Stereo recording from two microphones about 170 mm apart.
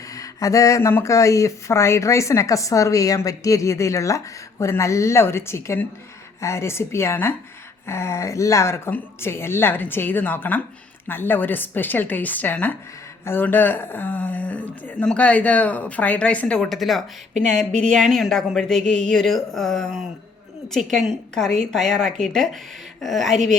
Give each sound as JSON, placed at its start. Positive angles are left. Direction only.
{"t": 0.1, "sound": "speech", "side_deg": 20}